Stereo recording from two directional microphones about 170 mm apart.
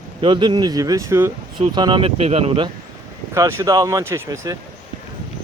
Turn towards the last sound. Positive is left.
turn(degrees=-15)  # may be behind; listen again after turning